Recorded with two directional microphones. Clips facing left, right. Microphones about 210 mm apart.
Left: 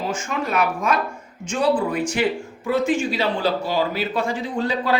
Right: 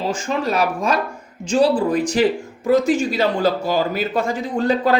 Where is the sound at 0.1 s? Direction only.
35° right (ahead or behind).